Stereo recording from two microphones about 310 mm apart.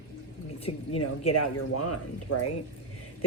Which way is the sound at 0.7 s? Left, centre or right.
Left.